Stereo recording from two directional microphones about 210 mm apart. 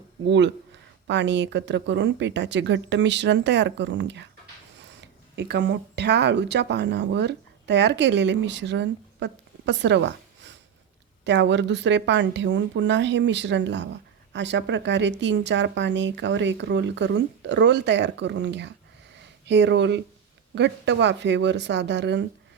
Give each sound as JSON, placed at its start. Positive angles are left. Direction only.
{"t": 0.3, "sound": "speech", "side_deg": -55}